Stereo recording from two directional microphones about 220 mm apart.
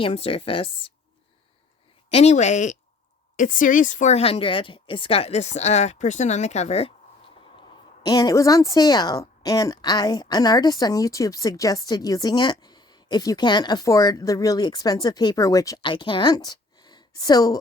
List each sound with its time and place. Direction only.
0.0 s speech: 25° left (ahead or behind)
2.0 s speech: 30° left (ahead or behind)
8.0 s a woman's voice: 15° left (ahead or behind)